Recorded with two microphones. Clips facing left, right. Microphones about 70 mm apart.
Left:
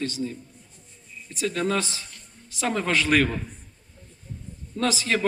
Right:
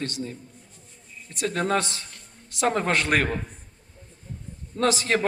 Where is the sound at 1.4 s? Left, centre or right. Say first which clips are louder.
Right 1 dB; right.